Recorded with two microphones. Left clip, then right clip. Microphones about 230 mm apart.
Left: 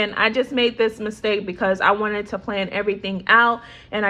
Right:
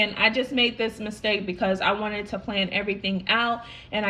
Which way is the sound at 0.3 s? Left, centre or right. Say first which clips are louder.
Left 4 dB; centre.